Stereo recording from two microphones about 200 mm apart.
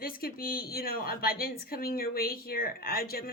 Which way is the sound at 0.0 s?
45° left (ahead or behind).